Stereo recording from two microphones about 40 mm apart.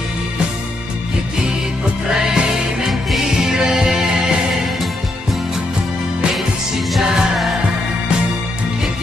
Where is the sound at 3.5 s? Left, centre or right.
Centre.